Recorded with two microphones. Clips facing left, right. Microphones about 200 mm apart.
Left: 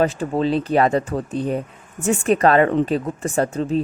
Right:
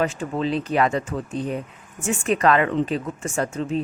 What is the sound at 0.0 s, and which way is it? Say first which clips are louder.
Speech: left 4 dB; 35° left (ahead or behind).